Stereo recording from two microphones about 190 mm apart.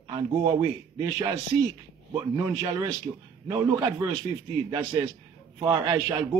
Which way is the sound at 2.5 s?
20° right (ahead or behind).